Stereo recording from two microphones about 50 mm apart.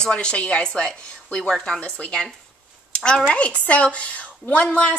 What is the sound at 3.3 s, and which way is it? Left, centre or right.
Speech, left.